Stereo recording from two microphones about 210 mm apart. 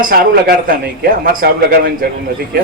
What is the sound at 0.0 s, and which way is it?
A man's voice, 45° right (ahead or behind).